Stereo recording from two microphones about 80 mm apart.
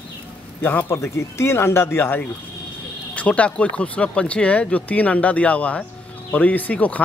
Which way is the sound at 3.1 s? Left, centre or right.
Centre.